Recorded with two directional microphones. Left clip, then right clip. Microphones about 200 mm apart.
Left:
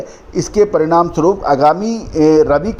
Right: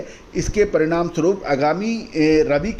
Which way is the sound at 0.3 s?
15° left (ahead or behind).